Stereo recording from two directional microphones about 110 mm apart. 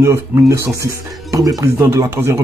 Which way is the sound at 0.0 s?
25° right (ahead or behind).